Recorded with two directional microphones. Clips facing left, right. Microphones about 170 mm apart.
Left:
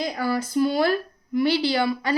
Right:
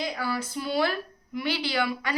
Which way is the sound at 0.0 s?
40° left (ahead or behind).